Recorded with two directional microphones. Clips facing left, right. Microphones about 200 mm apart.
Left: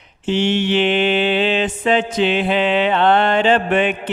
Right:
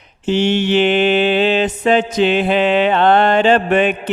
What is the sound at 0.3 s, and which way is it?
Mantra, 40° right (ahead or behind).